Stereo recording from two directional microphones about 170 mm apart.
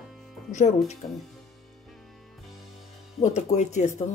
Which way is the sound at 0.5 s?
45° left (ahead or behind).